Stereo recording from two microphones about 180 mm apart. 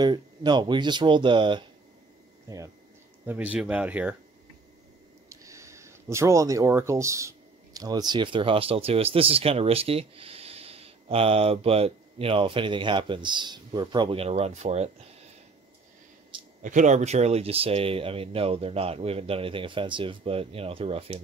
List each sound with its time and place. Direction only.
0.0 s speech: 25° right (ahead or behind)
3.3 s speech: 5° right (ahead or behind)
5.3 s speech: 15° right (ahead or behind); by 15.0 s 40° right (ahead or behind)
16.3 s a sound: 30° right (ahead or behind)
16.6 s speech: 45° right (ahead or behind)